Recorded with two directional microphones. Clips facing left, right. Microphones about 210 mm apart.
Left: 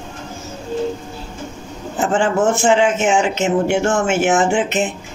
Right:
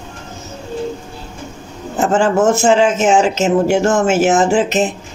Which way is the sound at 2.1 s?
40° right (ahead or behind).